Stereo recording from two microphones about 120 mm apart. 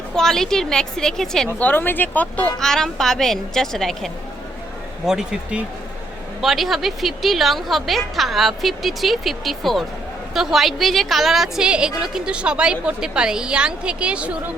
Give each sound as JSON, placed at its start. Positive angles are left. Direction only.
{"t": 0.2, "sound": "a woman's voice", "side_deg": 5}
{"t": 1.5, "sound": "a woman's voice", "side_deg": 15}